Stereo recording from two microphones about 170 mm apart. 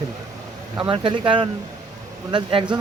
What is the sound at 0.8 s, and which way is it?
Speech, 30° right (ahead or behind).